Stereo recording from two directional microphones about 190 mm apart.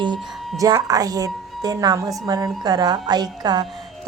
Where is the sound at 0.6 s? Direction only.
20° right (ahead or behind).